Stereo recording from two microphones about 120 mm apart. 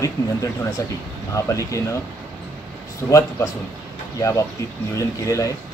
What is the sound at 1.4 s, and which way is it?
Speech, 25° left (ahead or behind).